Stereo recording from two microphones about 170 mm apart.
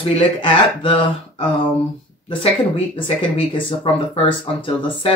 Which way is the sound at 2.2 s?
30° left (ahead or behind).